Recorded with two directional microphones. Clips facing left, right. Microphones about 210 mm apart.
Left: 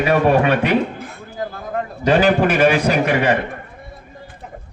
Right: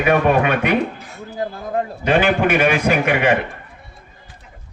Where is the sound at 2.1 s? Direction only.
35° left (ahead or behind).